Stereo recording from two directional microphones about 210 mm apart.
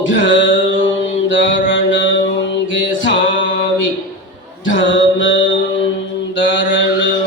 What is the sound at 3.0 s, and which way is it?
Mantra, 60° left (ahead or behind).